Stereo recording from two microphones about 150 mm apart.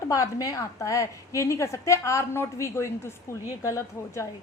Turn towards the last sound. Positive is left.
turn(degrees=20)  # may be behind; listen again after turning